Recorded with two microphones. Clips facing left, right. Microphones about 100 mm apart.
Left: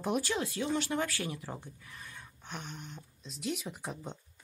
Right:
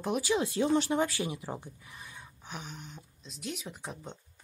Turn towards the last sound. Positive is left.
turn(degrees=0)  # may be behind; listen again after turning